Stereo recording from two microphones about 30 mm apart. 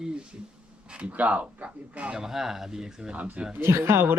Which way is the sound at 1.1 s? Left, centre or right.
Right.